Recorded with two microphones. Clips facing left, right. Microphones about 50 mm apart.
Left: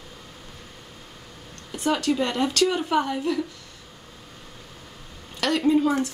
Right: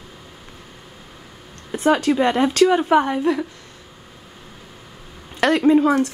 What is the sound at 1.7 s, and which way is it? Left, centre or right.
Speech, right.